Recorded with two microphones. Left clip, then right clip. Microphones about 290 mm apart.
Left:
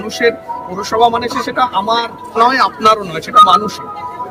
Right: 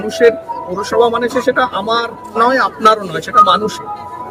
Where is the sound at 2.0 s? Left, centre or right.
Centre.